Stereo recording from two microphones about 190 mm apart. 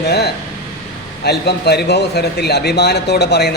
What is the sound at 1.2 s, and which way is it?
A man's voice, 60° left (ahead or behind).